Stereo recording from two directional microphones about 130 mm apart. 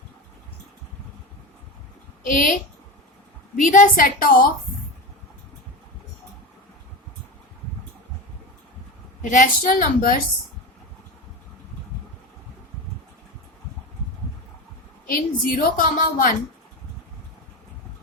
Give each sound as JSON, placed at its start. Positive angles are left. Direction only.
{"t": 2.2, "sound": "a woman's voice", "side_deg": 85}
{"t": 9.3, "sound": "a woman's voice", "side_deg": 80}
{"t": 15.0, "sound": "a woman's voice", "side_deg": 90}